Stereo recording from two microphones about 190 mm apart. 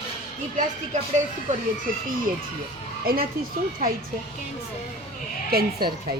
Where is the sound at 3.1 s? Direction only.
50° right (ahead or behind).